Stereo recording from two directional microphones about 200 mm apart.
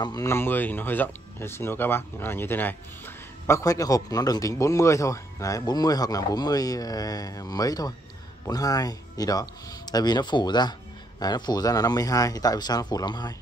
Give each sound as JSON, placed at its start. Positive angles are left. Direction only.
{"t": 0.0, "sound": "speech", "side_deg": 15}